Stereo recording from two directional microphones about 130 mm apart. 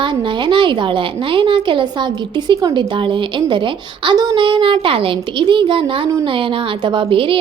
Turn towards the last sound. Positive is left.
turn(degrees=-40)  # may be behind; listen again after turning